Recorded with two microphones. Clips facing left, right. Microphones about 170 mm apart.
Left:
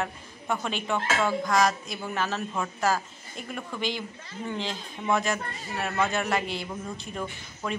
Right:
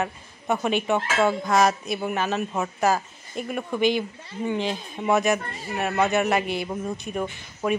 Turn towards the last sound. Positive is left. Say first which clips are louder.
# right 7 dB
turn(degrees=-15)  # may be behind; listen again after turning